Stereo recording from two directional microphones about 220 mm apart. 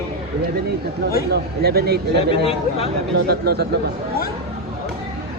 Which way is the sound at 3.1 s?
45° right (ahead or behind).